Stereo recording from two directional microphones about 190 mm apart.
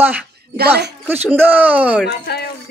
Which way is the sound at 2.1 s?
55° left (ahead or behind).